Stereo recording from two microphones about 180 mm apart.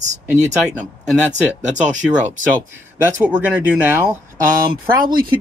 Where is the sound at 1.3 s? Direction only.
40° right (ahead or behind).